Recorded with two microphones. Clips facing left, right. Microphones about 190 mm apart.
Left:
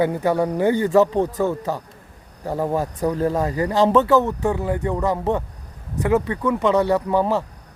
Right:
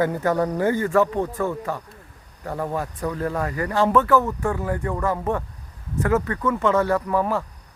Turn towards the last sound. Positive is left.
turn(degrees=25)  # may be behind; listen again after turning